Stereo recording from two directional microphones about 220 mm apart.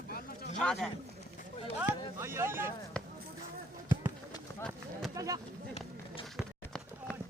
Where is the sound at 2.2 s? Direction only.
10° right (ahead or behind).